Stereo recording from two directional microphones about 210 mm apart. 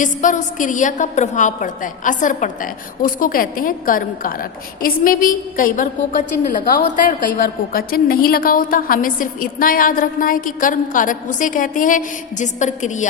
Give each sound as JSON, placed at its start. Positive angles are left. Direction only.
{"t": 0.0, "sound": "a woman's voice", "side_deg": 40}